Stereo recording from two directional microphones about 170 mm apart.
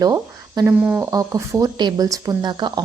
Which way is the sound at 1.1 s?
20° right (ahead or behind).